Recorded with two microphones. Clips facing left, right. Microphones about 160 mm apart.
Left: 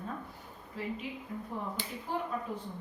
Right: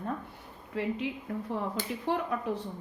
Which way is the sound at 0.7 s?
75° right (ahead or behind).